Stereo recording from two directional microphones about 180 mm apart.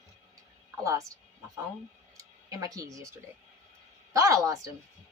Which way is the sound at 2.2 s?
20° right (ahead or behind).